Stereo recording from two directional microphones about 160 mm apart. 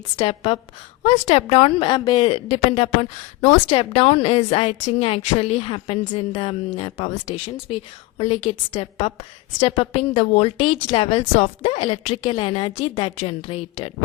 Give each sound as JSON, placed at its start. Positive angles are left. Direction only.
{"t": 0.2, "sound": "a woman's voice", "side_deg": 35}